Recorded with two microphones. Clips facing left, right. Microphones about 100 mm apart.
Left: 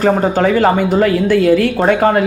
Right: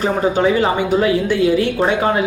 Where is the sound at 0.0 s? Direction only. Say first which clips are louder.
Left 3 dB; 45° left (ahead or behind).